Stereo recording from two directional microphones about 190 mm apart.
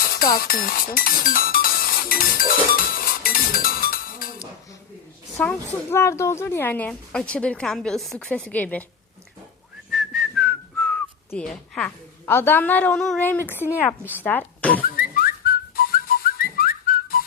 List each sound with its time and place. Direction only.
0.3 s speech: 50° left (ahead or behind)
2.7 s cowbell: 50° left (ahead or behind)
5.4 s speech: 10° left (ahead or behind)
9.9 s whistling: centre (ahead or behind)
14.2 s a woman's voice: 10° left (ahead or behind)
14.9 s whistling: 50° left (ahead or behind)